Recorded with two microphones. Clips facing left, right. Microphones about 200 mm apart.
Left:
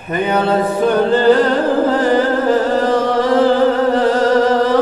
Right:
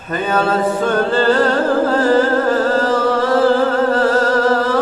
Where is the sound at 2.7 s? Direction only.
15° left (ahead or behind).